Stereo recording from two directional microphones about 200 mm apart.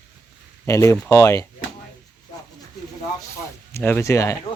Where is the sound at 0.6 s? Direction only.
15° left (ahead or behind).